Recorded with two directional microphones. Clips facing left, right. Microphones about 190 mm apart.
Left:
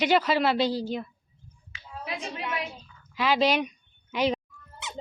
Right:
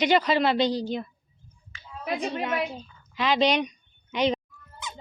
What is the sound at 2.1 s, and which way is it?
Speech, 35° right (ahead or behind).